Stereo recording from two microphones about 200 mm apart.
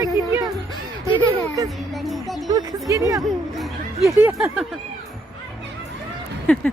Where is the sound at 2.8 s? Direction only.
15° right (ahead or behind).